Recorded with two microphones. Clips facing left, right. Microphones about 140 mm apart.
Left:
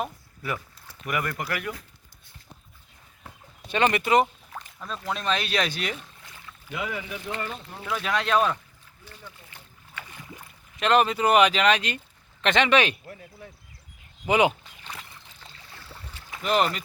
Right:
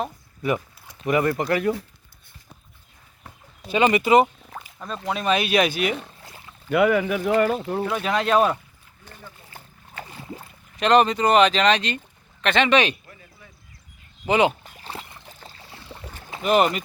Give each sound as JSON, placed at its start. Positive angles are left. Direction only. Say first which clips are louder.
{"t": 0.4, "sound": "speech", "louder": "right 8 dB", "side_deg": -20}
{"t": 3.7, "sound": "speech", "louder": "right 5 dB", "side_deg": -5}
{"t": 6.2, "sound": "boat", "louder": "right 4 dB", "side_deg": -30}
{"t": 6.7, "sound": "speech", "louder": "right 14 dB", "side_deg": -65}
{"t": 7.9, "sound": "speech", "louder": "right 3 dB", "side_deg": -40}
{"t": 9.0, "sound": "boat", "louder": "right 2 dB", "side_deg": -50}
{"t": 10.8, "sound": "speech", "louder": "right 4 dB", "side_deg": 5}
{"t": 12.9, "sound": "speech", "louder": "right 1 dB", "side_deg": 60}
{"t": 14.3, "sound": "speech", "louder": "right 2 dB", "side_deg": 10}
{"t": 14.6, "sound": "a sound", "louder": "right 5 dB", "side_deg": -35}
{"t": 15.3, "sound": "boat", "louder": "right 5 dB", "side_deg": -45}
{"t": 16.4, "sound": "speech", "louder": "right 5 dB", "side_deg": -10}